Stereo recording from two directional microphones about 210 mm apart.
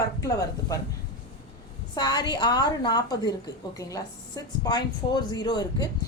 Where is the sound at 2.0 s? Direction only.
20° left (ahead or behind).